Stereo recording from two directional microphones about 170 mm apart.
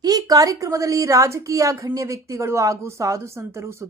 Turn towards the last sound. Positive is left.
turn(degrees=-15)  # may be behind; listen again after turning